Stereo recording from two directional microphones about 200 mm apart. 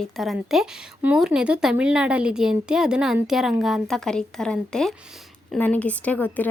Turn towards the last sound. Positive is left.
turn(degrees=10)  # may be behind; listen again after turning